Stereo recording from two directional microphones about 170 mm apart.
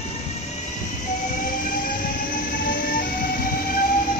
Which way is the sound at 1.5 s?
55° left (ahead or behind).